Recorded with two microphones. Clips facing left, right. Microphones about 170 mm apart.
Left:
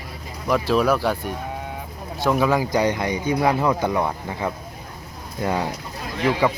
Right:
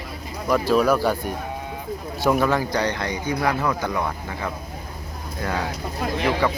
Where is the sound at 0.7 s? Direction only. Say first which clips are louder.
Right 1 dB; centre (ahead or behind).